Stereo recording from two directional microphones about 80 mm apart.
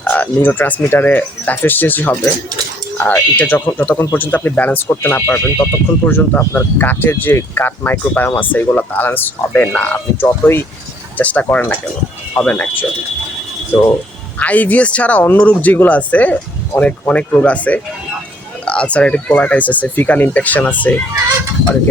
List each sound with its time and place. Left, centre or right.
0.0 s speech: left
11.2 s speech: centre
14.3 s speech: centre